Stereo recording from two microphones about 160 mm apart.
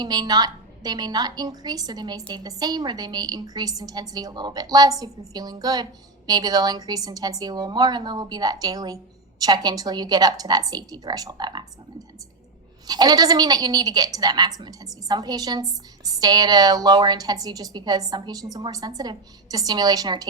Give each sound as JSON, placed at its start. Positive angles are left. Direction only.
{"t": 0.0, "sound": "a woman's voice", "side_deg": -25}
{"t": 12.9, "sound": "a woman's voice", "side_deg": -25}